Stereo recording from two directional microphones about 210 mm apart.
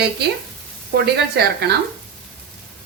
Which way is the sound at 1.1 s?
50° right (ahead or behind).